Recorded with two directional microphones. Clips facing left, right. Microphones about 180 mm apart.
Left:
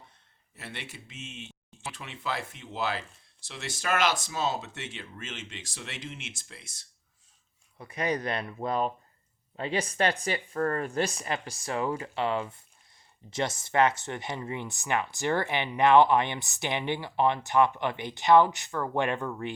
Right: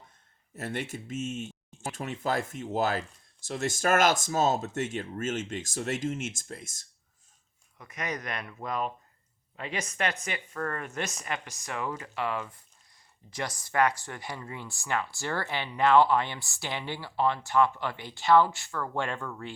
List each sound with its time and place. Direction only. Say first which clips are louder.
0.5 s speech: right 8 dB; 45° right (ahead or behind)
7.8 s a woman's voice: left 6 dB; 30° left (ahead or behind)